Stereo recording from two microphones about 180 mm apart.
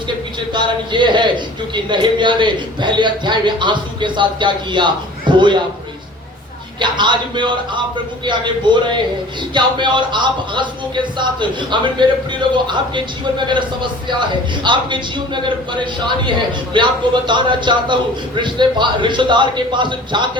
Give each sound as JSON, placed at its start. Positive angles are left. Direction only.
{"t": 0.3, "sound": "speech", "side_deg": -25}
{"t": 6.7, "sound": "speech", "side_deg": -25}
{"t": 14.1, "sound": "speech", "side_deg": -25}